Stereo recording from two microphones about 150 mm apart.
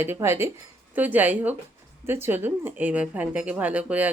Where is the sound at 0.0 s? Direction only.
15° right (ahead or behind).